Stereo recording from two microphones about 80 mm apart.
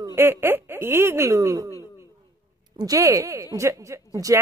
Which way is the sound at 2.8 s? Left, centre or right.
Right.